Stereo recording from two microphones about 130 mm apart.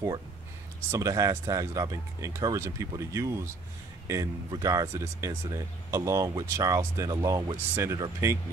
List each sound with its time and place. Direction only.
0.9 s speech: 25° right (ahead or behind)